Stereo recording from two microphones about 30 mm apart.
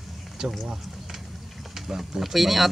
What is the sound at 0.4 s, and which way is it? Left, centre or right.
Speech, right.